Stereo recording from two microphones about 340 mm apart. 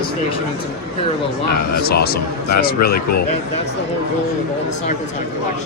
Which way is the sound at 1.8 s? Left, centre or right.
Left.